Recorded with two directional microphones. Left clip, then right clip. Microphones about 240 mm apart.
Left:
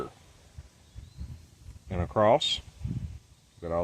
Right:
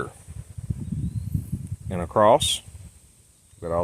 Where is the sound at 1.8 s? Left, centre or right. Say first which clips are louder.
Right 6 dB; right.